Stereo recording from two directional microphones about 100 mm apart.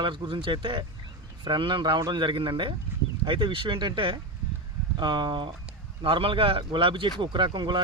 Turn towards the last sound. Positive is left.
turn(degrees=-55)  # may be behind; listen again after turning